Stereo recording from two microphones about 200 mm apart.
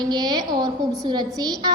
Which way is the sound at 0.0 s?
20° right (ahead or behind).